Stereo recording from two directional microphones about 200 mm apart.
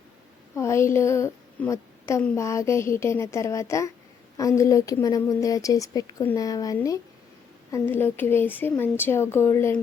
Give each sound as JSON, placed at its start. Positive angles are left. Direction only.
{"t": 0.5, "sound": "a woman's voice", "side_deg": 15}